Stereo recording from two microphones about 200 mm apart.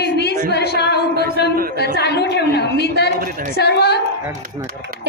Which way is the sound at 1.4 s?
55° left (ahead or behind).